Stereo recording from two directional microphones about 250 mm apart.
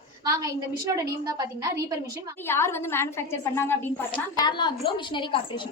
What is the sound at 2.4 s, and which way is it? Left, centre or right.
A woman's voice, centre.